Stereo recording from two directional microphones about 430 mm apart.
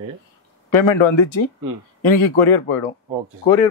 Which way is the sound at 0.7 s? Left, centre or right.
Left.